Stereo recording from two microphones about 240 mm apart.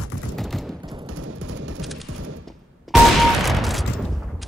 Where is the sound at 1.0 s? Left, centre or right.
Right.